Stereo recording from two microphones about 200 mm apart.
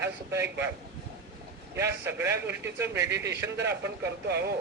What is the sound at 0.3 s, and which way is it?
Speech, 10° right (ahead or behind).